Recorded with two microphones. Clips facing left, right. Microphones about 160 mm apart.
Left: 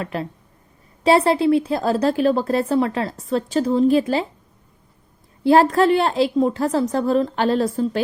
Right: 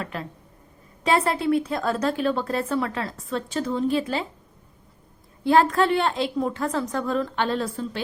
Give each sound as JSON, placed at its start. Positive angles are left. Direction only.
{"t": 0.0, "sound": "a woman's voice", "side_deg": 30}
{"t": 5.4, "sound": "a woman's voice", "side_deg": 35}